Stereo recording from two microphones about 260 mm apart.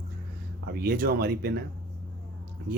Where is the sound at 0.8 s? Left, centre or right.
Right.